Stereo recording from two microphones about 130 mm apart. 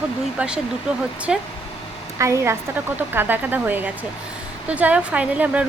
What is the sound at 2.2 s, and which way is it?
A woman's voice, 20° right (ahead or behind).